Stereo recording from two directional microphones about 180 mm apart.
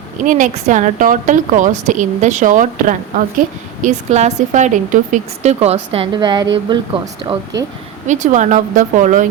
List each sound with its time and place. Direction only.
0.3 s a woman's voice: 45° right (ahead or behind); by 7.3 s 25° right (ahead or behind)
8.0 s a woman's voice: 40° right (ahead or behind)